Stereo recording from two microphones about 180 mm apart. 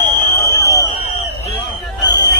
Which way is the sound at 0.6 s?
15° left (ahead or behind).